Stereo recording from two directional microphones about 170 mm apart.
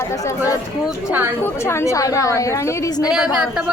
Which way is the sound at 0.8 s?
10° right (ahead or behind).